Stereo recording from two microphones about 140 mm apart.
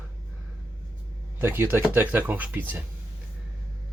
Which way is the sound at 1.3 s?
15° right (ahead or behind).